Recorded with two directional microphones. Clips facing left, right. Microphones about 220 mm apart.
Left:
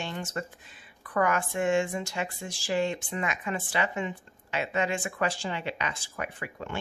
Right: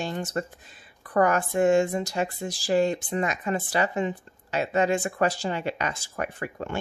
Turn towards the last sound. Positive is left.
turn(degrees=-45)  # may be behind; listen again after turning